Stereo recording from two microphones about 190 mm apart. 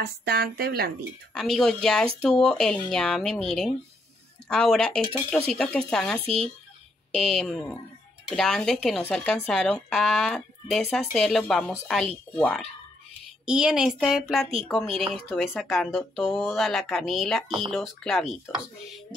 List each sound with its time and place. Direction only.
0.0 s speech: 55° right (ahead or behind)
1.3 s speech: centre (ahead or behind)
6.2 s speech: 30° right (ahead or behind)
7.2 s speech: centre (ahead or behind)